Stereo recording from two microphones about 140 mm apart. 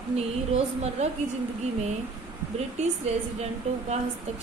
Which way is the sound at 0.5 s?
50° right (ahead or behind).